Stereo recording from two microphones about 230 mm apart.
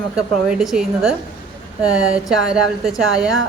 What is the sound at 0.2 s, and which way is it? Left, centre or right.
A woman's voice, centre.